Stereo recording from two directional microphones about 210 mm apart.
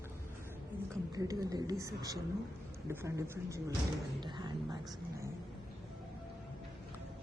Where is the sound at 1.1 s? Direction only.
15° right (ahead or behind).